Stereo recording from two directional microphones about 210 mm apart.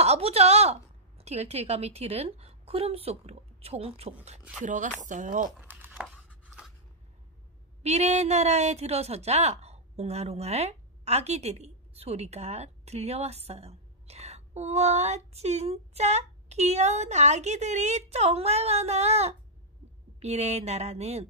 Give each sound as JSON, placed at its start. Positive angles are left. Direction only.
{"t": 0.0, "sound": "a woman's voice", "side_deg": -30}
{"t": 5.6, "sound": "crumpling", "side_deg": -10}
{"t": 7.8, "sound": "a woman's voice", "side_deg": -30}